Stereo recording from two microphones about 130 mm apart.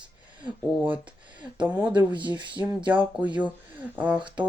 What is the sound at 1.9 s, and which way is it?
Speech, 35° right (ahead or behind).